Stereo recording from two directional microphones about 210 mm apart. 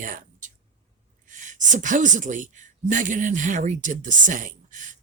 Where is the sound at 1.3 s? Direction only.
35° right (ahead or behind).